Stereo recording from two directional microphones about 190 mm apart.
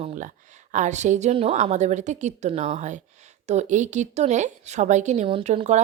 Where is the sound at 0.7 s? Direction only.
40° right (ahead or behind).